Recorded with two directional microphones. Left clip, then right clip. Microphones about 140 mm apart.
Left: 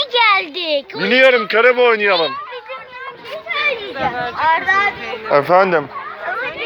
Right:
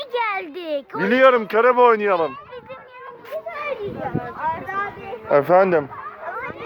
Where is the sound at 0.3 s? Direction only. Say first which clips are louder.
Left 8 dB; 55° right (ahead or behind).